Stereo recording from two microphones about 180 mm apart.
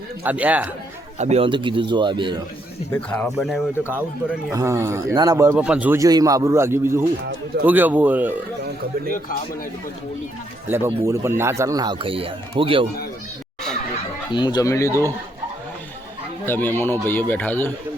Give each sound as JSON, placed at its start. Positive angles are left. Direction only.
{"t": 0.3, "sound": "speech", "side_deg": -10}
{"t": 1.2, "sound": "speech", "side_deg": -35}
{"t": 2.9, "sound": "speech", "side_deg": 10}
{"t": 3.3, "sound": "speech", "side_deg": 0}
{"t": 4.5, "sound": "speech", "side_deg": -15}
{"t": 10.7, "sound": "speech", "side_deg": -10}
{"t": 14.3, "sound": "speech", "side_deg": 25}
{"t": 16.5, "sound": "speech", "side_deg": 10}